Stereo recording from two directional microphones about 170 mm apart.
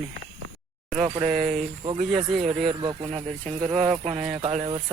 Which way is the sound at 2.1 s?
Centre (ahead or behind).